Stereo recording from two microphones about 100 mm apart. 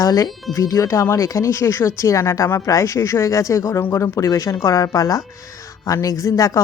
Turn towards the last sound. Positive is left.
turn(degrees=35)  # may be behind; listen again after turning